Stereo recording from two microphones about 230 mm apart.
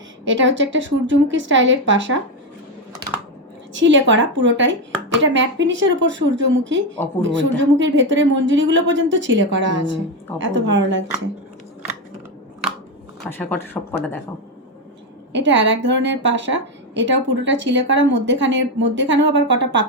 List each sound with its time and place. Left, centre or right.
0.4 s a woman's voice: right
3.8 s a woman's voice: right
13.3 s speech: centre
15.3 s a woman's voice: right